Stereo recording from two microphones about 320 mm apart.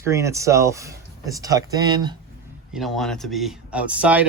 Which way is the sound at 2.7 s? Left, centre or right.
Centre.